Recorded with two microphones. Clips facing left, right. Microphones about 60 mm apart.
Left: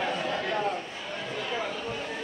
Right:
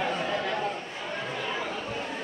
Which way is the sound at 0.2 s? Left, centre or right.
Right.